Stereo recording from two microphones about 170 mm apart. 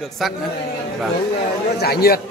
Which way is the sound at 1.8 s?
65° left (ahead or behind).